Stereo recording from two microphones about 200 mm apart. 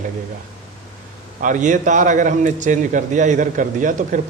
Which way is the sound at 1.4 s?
40° right (ahead or behind).